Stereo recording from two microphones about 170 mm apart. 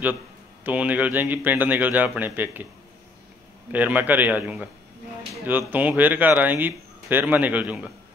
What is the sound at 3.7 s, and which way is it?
Speech, 10° right (ahead or behind).